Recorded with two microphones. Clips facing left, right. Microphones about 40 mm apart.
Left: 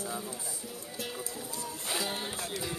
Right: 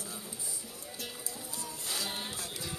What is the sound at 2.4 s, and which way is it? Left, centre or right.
Music, centre.